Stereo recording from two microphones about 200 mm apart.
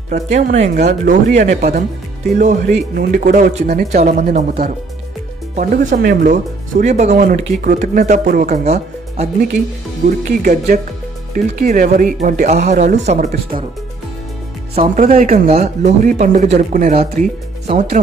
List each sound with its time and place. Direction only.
0.1 s speech: 35° right (ahead or behind)
15.0 s speech: 40° right (ahead or behind)